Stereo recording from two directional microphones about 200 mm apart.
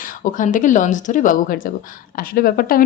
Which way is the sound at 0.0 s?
40° left (ahead or behind).